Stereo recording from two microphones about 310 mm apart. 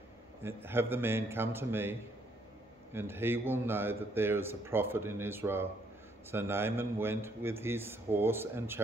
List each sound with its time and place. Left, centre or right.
0.4 s a man's voice: centre